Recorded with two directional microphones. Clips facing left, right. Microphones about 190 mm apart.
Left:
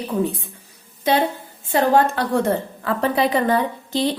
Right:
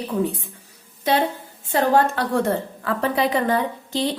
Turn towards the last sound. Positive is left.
turn(degrees=35)  # may be behind; listen again after turning